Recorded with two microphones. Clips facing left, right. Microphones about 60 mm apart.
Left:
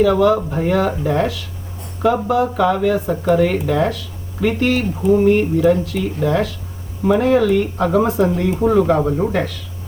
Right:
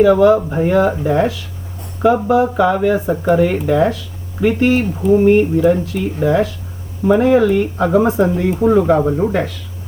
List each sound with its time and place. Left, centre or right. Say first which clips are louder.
0.0 s speech: right 4 dB; centre
2.0 s speech: right 3 dB; centre
8.6 s speech: right 2 dB; centre